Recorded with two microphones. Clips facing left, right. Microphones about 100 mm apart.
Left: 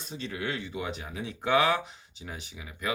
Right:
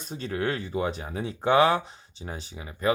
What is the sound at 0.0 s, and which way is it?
Speech, 45° right (ahead or behind).